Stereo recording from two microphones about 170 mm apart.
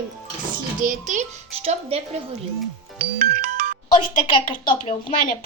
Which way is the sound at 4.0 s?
30° left (ahead or behind).